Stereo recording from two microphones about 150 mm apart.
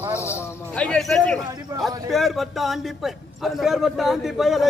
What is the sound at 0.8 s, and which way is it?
A man's voice, centre (ahead or behind).